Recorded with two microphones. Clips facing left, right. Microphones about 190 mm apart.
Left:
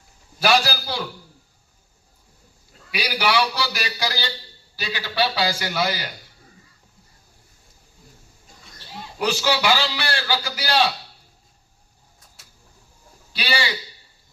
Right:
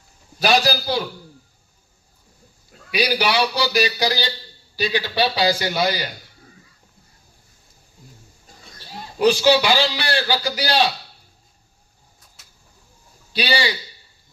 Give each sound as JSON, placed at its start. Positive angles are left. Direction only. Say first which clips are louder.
{"t": 0.4, "sound": "a man's voice", "louder": "right 2 dB", "side_deg": -15}
{"t": 2.9, "sound": "a man's voice", "louder": "right 2 dB", "side_deg": -20}
{"t": 9.1, "sound": "a man's voice", "louder": "right 7 dB", "side_deg": -20}
{"t": 13.3, "sound": "a man's voice", "louder": "right 4 dB", "side_deg": -15}